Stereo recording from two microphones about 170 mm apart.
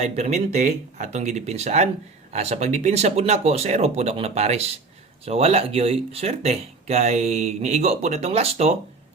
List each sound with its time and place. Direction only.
0.0 s speech: 40° right (ahead or behind)